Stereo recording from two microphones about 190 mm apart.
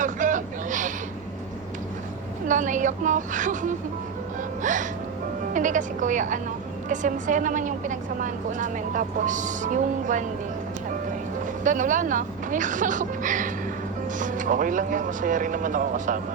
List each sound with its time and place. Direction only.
0.0 s a sound: 40° right (ahead or behind)
2.5 s a woman's voice: 40° right (ahead or behind)
11.6 s speech: 45° right (ahead or behind)